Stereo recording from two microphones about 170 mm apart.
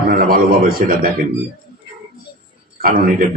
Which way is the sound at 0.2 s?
55° right (ahead or behind).